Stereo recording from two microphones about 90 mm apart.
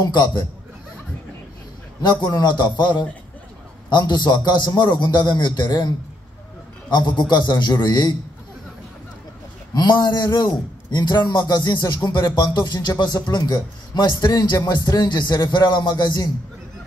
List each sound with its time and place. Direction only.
0.0 s a man's voice: 45° left (ahead or behind)
2.2 s a man's voice: 50° left (ahead or behind)
9.8 s a man's voice: 50° left (ahead or behind)